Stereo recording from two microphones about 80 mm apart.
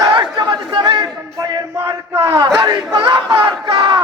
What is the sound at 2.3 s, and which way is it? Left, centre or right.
A man's voice, right.